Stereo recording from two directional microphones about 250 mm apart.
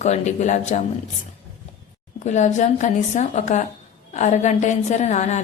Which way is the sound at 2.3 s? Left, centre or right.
Left.